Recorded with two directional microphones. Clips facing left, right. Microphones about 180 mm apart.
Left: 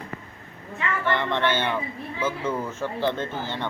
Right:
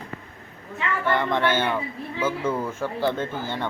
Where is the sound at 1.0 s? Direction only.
10° right (ahead or behind).